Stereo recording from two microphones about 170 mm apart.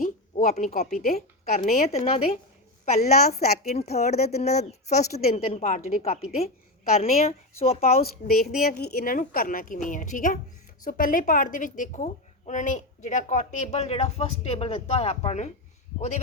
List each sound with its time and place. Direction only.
0.0 s a woman's voice: 45° left (ahead or behind)
3.0 s a woman's voice: 65° left (ahead or behind)
3.8 s a woman's voice: 40° left (ahead or behind)
8.0 s a woman's voice: 65° left (ahead or behind); by 15.4 s 40° left (ahead or behind)